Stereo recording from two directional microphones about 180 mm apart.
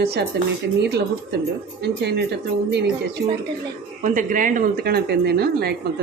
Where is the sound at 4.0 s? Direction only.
45° right (ahead or behind).